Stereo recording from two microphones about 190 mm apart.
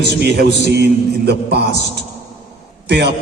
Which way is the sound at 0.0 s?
60° right (ahead or behind).